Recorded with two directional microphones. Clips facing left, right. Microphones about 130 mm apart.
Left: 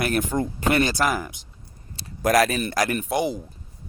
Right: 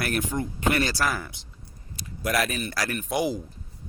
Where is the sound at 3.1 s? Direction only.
Centre (ahead or behind).